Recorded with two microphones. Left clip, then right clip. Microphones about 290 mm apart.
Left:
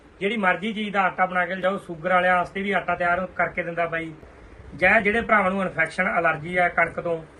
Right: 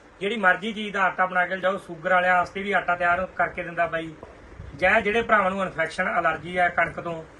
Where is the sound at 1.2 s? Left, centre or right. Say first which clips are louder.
Even; left.